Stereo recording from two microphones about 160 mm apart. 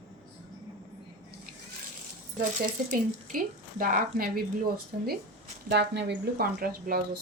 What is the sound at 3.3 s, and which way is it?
A woman's voice, 60° right (ahead or behind).